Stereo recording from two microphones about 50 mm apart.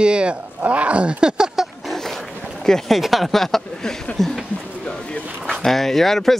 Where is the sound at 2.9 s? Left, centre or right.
Centre.